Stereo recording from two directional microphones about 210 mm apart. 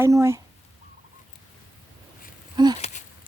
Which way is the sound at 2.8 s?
35° left (ahead or behind).